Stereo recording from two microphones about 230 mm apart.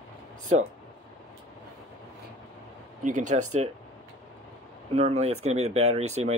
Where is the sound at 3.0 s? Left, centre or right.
Right.